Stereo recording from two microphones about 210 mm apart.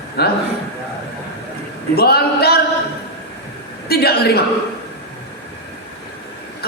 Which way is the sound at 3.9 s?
50° left (ahead or behind).